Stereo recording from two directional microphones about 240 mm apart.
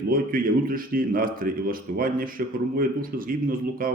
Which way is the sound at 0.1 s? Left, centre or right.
Right.